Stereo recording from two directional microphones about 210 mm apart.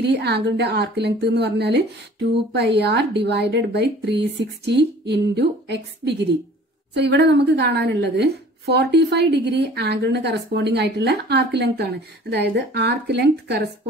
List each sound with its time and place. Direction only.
0.0 s a woman's voice: 55° right (ahead or behind)